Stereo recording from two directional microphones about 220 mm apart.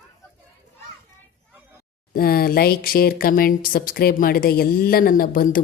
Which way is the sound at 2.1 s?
40° left (ahead or behind).